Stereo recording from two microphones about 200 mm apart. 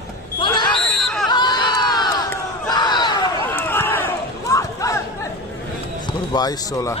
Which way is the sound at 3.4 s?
10° left (ahead or behind).